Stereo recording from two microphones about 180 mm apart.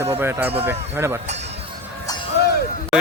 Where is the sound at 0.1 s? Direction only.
10° right (ahead or behind).